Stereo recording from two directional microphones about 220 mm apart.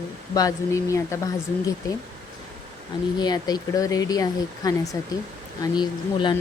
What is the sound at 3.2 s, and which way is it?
Speech, 20° left (ahead or behind).